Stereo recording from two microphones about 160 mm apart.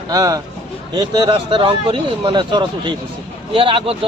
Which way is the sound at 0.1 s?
20° right (ahead or behind).